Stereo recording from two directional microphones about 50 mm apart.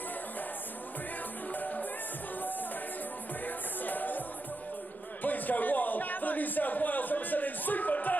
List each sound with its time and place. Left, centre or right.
1.5 s music: left
3.4 s music: left
5.2 s a man's voice: left